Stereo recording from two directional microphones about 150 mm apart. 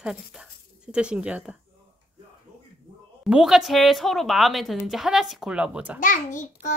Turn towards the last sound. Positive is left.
turn(degrees=55)  # may be behind; listen again after turning